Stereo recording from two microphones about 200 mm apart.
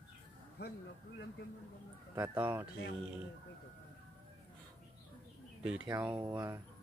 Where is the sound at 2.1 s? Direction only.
10° right (ahead or behind).